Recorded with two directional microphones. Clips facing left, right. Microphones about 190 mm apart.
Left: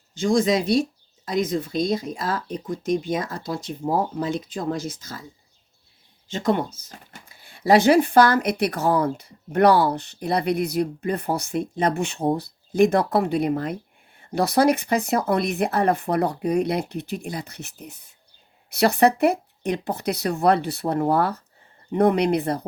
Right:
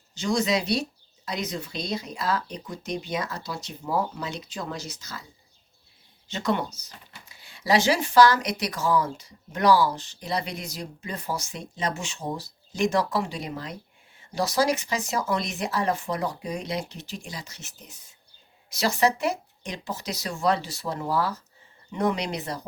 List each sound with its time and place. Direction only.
0.1 s speech: 50° left (ahead or behind)
6.2 s speech: 50° left (ahead or behind)